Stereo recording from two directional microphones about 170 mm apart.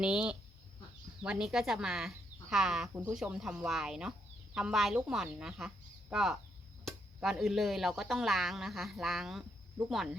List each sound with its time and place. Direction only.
0.0 s speech: 5° right (ahead or behind)